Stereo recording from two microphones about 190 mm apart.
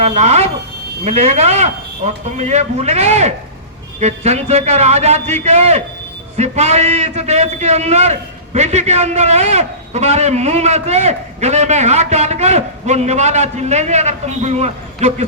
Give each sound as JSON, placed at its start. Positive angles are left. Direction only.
{"t": 0.0, "sound": "a man's voice", "side_deg": -35}